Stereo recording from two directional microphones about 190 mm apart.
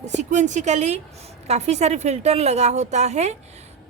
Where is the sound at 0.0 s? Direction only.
35° right (ahead or behind).